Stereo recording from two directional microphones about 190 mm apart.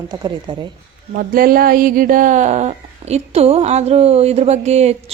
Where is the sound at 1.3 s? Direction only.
50° right (ahead or behind).